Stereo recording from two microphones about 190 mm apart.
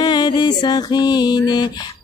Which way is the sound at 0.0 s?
25° left (ahead or behind).